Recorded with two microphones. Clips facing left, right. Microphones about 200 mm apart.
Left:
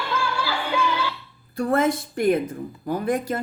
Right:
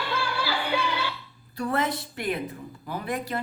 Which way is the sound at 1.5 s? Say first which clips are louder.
Left 6 dB; 45° left (ahead or behind).